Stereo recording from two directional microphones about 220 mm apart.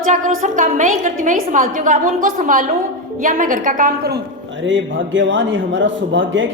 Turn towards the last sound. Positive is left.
turn(degrees=-60)  # may be behind; listen again after turning